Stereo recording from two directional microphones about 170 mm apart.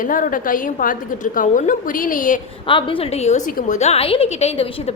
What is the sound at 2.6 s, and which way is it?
A woman's voice, 30° left (ahead or behind).